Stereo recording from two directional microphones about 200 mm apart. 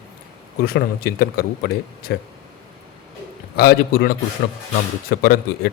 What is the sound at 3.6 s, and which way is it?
Speech, 50° left (ahead or behind).